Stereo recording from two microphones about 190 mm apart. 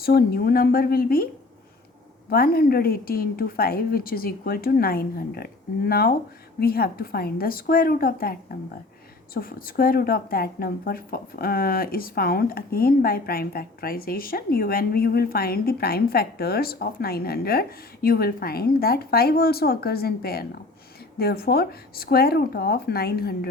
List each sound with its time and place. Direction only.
0.0 s a woman's voice: 55° left (ahead or behind)
2.3 s a woman's voice: 55° left (ahead or behind)